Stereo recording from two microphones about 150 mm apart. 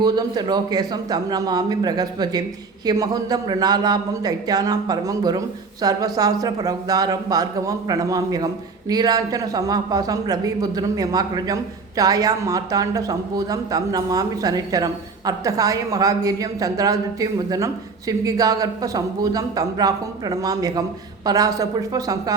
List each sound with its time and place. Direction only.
0.0 s speech: 25° right (ahead or behind)